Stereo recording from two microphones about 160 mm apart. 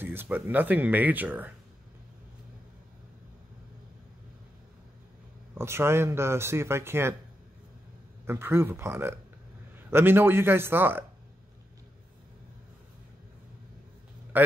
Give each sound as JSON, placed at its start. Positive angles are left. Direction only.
{"t": 0.0, "sound": "speech", "side_deg": -15}
{"t": 5.5, "sound": "speech", "side_deg": -15}
{"t": 8.3, "sound": "speech", "side_deg": -15}
{"t": 14.3, "sound": "a sound", "side_deg": -10}